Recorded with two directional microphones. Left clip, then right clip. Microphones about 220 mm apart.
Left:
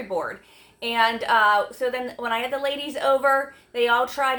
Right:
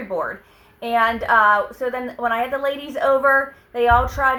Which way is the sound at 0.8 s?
25° left (ahead or behind).